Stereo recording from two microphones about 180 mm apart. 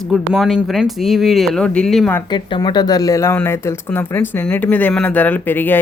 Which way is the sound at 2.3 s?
25° left (ahead or behind).